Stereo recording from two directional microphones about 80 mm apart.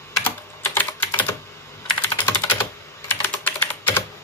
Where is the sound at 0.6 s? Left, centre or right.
Left.